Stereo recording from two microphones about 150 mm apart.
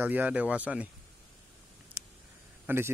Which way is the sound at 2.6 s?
15° right (ahead or behind).